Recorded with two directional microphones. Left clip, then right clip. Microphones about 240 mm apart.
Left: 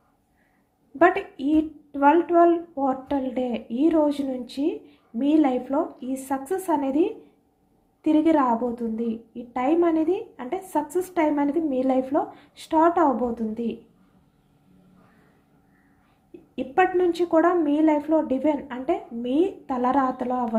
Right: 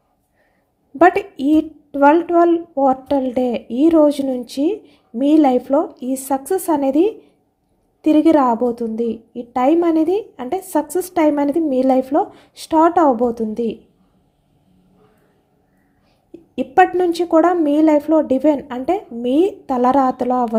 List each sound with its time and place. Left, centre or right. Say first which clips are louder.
0.9 s a woman's voice: right 7 dB; right
16.6 s a woman's voice: right 7 dB; right